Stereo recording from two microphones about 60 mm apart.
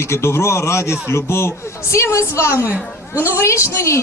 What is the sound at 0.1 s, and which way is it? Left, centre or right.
A man's voice, left.